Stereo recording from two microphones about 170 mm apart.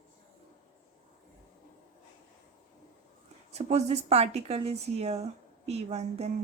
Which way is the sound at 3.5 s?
40° right (ahead or behind).